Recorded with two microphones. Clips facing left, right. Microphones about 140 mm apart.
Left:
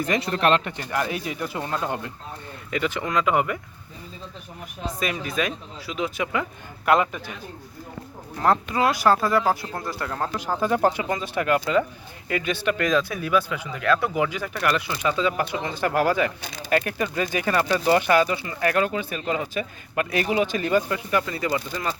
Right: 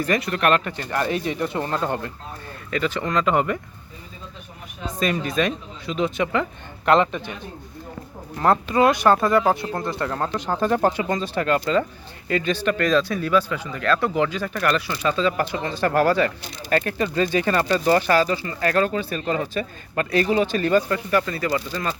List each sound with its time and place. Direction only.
0.2 s speech: 30° left (ahead or behind)
0.9 s speech: 5° left (ahead or behind)
4.9 s speech: 10° left (ahead or behind)
8.7 s speech: centre (ahead or behind)